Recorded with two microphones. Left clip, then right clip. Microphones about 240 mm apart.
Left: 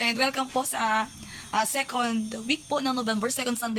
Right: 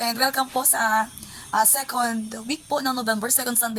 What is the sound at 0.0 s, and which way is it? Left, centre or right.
A woman's voice, centre.